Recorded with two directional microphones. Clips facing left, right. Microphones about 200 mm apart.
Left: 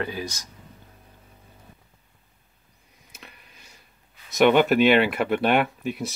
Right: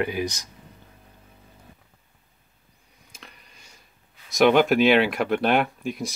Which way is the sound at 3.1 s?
5° left (ahead or behind).